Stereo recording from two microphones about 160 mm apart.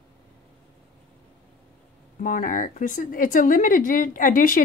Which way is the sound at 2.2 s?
55° left (ahead or behind).